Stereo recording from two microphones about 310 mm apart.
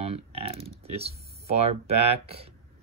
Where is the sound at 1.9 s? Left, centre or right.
Right.